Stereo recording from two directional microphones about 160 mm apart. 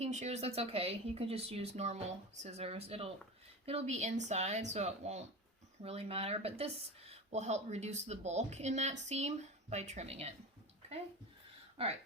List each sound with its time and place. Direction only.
0.0 s speech: 45° right (ahead or behind)